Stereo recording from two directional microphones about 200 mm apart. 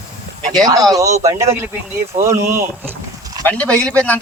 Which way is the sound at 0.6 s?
20° right (ahead or behind).